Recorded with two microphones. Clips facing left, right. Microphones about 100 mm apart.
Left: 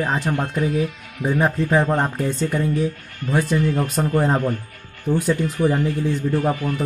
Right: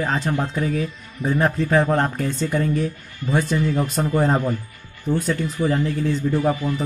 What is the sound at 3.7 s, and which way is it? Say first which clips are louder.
Speech: even; 50° left (ahead or behind).